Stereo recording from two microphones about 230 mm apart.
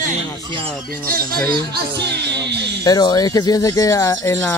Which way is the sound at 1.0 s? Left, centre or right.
Right.